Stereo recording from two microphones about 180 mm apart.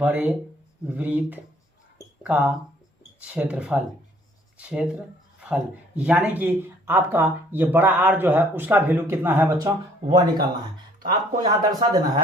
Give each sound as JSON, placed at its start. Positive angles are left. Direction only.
{"t": 0.0, "sound": "speech", "side_deg": -10}
{"t": 6.0, "sound": "speech", "side_deg": -5}
{"t": 11.0, "sound": "speech", "side_deg": -50}
{"t": 11.4, "sound": "speech", "side_deg": -20}